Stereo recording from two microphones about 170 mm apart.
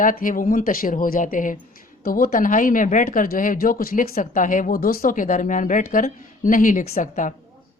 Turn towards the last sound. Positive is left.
turn(degrees=50)  # may be behind; listen again after turning